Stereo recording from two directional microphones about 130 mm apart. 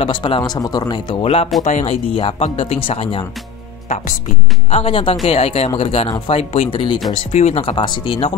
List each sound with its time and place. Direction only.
0.0 s a man's voice: 40° left (ahead or behind)
1.2 s speech: 50° left (ahead or behind)
1.6 s speech: 65° left (ahead or behind)
2.0 s speech: 45° left (ahead or behind)
4.6 s speech: 50° left (ahead or behind)
6.0 s a man's voice: 30° left (ahead or behind)
6.3 s speech: 50° left (ahead or behind)
7.3 s speech: 55° left (ahead or behind)